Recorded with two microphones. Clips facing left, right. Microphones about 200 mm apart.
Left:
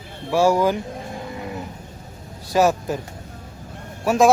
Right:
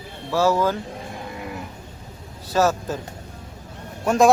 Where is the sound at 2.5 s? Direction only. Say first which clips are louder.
Left 2 dB; 15° left (ahead or behind).